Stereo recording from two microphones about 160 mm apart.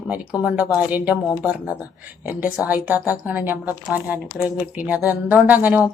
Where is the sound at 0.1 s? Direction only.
10° right (ahead or behind).